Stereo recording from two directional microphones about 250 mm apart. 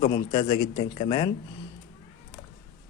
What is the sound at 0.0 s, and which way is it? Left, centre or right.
Speech, left.